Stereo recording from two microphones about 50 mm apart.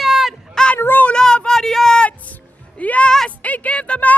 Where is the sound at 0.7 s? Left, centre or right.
Left.